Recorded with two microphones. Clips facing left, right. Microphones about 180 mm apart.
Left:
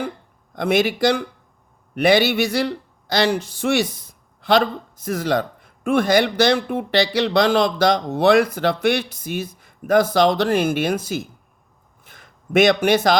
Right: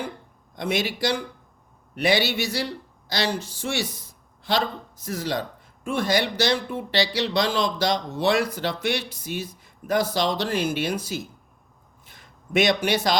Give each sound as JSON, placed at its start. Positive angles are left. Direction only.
{"t": 0.5, "sound": "speech", "side_deg": 55}
{"t": 5.0, "sound": "speech", "side_deg": 60}
{"t": 12.0, "sound": "a sound", "side_deg": 50}